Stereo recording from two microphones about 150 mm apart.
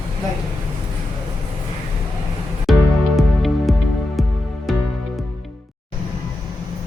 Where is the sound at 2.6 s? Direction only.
Centre (ahead or behind).